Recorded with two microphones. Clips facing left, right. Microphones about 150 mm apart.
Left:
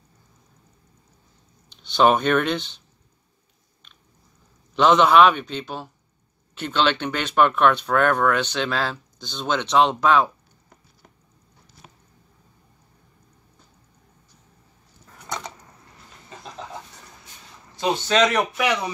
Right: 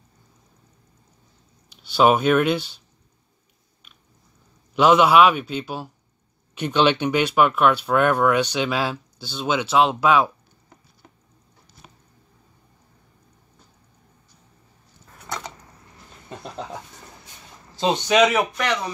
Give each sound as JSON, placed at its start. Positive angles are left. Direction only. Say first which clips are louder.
{"t": 1.7, "sound": "speech", "louder": "right 1 dB", "side_deg": -5}
{"t": 4.7, "sound": "speech", "louder": "right 1 dB", "side_deg": -10}
{"t": 15.2, "sound": "a sound", "louder": "even", "side_deg": 0}
{"t": 16.3, "sound": "a sound", "louder": "right 5 dB", "side_deg": -60}
{"t": 17.7, "sound": "speech", "louder": "right 2 dB", "side_deg": -20}
{"t": 18.5, "sound": "speech", "louder": "left 2 dB", "side_deg": 10}